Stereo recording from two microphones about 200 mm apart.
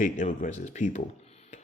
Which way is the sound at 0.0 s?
40° left (ahead or behind).